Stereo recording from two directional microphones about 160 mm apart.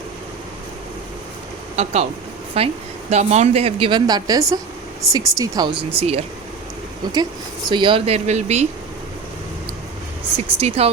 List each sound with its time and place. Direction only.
1.7 s a woman's voice: 40° right (ahead or behind)
7.7 s speech: 30° right (ahead or behind)
10.3 s speech: 40° right (ahead or behind)